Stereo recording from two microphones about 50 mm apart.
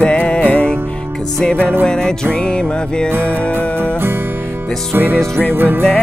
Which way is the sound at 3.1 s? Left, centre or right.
Right.